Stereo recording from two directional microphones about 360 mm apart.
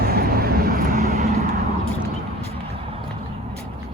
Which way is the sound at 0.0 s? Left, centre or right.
Right.